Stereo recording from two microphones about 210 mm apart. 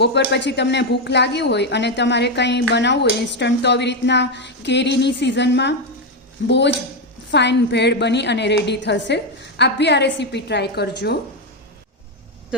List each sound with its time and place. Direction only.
0.3 s speech: 55° left (ahead or behind)